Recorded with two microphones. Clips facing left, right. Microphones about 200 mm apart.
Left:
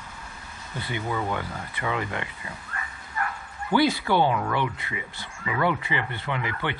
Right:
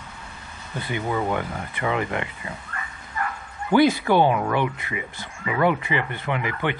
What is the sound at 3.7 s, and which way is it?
Speech, 20° right (ahead or behind).